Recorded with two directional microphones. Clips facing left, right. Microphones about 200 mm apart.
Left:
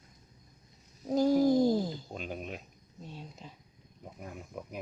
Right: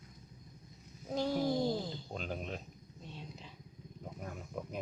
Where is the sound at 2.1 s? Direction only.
5° left (ahead or behind).